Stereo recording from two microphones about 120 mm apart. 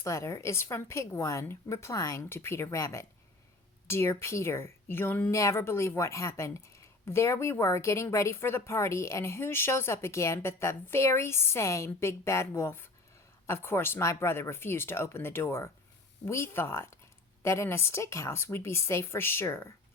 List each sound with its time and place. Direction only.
0.0 s speech: 25° left (ahead or behind)